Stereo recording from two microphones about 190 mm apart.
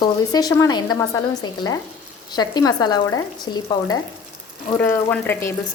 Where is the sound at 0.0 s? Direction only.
20° left (ahead or behind).